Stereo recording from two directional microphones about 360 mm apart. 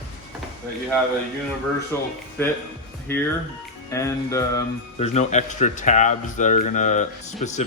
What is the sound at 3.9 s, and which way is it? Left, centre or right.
Speech, centre.